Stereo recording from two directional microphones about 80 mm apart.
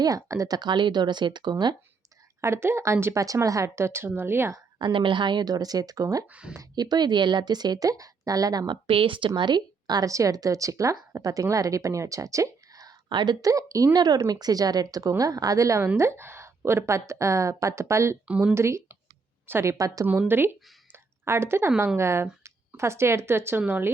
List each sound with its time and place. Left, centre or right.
0.0 s speech: right
0.4 s speech: right
2.4 s a woman's voice: right
4.8 s speech: right
6.2 s speech: centre
6.7 s speech: right
10.1 s a woman's voice: right
13.1 s speech: right
13.4 s a woman's voice: right
18.3 s speech: centre
18.5 s speech: right
20.9 s a sound: right
21.9 s speech: right